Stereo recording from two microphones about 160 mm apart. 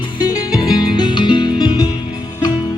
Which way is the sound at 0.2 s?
25° left (ahead or behind).